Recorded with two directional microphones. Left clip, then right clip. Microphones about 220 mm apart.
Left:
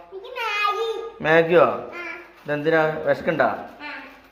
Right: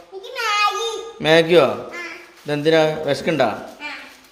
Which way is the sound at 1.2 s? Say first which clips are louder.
Right 2 dB; 35° right (ahead or behind).